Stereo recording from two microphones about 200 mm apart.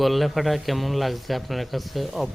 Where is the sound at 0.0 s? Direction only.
Centre (ahead or behind).